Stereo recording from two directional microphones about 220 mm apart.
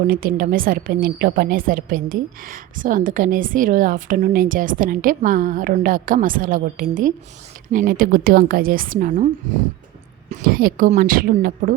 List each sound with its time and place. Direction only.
0.1 s a woman's voice: 40° right (ahead or behind)